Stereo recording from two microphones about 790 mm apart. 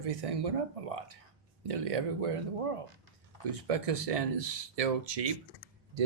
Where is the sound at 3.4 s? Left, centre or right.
Right.